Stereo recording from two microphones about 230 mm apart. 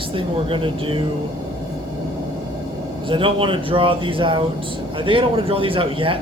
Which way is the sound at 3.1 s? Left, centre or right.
Right.